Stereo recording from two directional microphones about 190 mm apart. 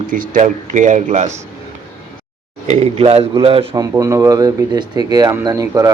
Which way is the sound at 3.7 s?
15° right (ahead or behind).